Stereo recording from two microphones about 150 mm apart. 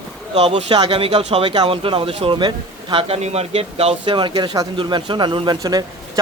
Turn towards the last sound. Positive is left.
turn(degrees=-30)  # may be behind; listen again after turning